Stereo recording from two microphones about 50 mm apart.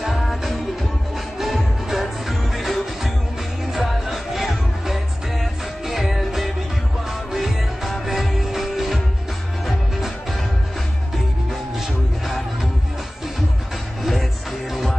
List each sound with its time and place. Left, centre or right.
0.0 s music: centre